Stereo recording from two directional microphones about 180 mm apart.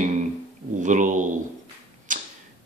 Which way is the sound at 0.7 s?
45° right (ahead or behind).